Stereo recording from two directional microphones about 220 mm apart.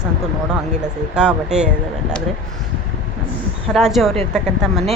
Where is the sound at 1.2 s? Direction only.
5° right (ahead or behind).